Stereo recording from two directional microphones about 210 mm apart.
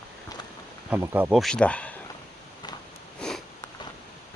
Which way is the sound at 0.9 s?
10° right (ahead or behind).